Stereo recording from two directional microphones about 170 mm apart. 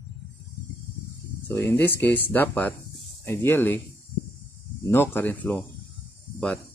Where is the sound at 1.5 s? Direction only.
15° left (ahead or behind).